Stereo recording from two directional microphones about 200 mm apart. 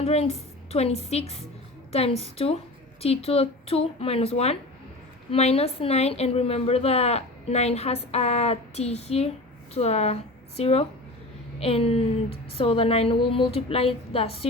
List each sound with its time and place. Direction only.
0.0 s a woman's voice: 30° left (ahead or behind)